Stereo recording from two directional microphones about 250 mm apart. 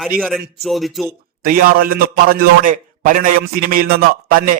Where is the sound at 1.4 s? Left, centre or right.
Right.